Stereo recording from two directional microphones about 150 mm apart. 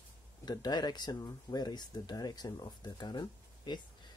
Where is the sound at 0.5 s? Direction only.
25° left (ahead or behind).